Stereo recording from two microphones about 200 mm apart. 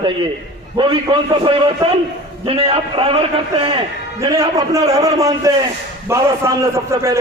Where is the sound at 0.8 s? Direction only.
25° right (ahead or behind).